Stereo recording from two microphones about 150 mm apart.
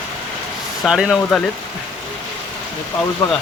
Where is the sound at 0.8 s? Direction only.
5° right (ahead or behind).